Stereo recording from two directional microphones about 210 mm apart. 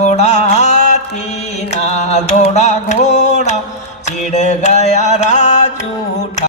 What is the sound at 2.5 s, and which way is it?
Music, 35° left (ahead or behind).